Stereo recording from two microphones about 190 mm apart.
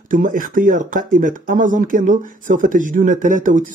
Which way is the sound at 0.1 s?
45° right (ahead or behind).